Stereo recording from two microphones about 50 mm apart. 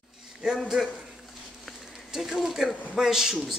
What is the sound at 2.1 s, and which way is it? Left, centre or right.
Speech, centre.